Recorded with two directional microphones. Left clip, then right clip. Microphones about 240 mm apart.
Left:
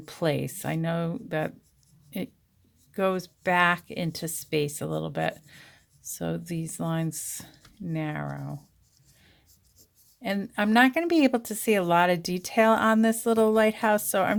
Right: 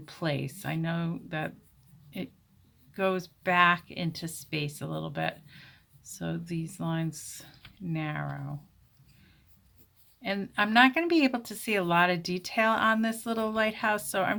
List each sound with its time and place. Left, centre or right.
0.0 s speech: left
10.2 s speech: left